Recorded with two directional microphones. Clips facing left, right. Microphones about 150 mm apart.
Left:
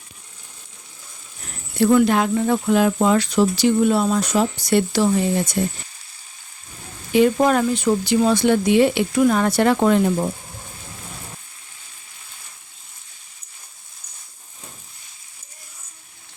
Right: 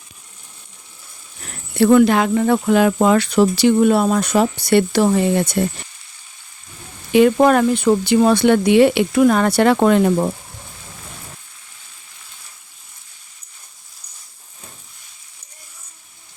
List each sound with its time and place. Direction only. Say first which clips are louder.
1.8 s speech: right 3 dB; 75° right (ahead or behind)
7.1 s speech: right 4 dB; 70° right (ahead or behind)